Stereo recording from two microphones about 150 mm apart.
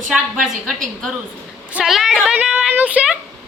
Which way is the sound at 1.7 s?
5° right (ahead or behind).